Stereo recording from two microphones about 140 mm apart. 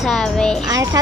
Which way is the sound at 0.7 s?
25° right (ahead or behind).